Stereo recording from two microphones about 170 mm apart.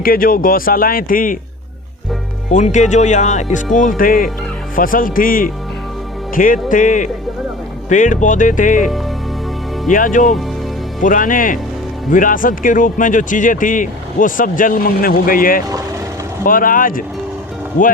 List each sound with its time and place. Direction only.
0.0 s speech: 55° left (ahead or behind)
2.5 s speech: 45° left (ahead or behind)
9.9 s speech: 50° left (ahead or behind)